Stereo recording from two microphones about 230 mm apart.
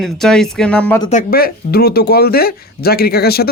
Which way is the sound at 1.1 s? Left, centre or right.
Left.